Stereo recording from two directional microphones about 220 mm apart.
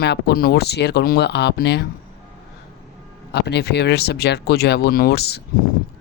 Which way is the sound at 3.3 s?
50° left (ahead or behind).